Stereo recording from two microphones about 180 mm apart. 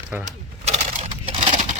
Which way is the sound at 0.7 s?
30° right (ahead or behind).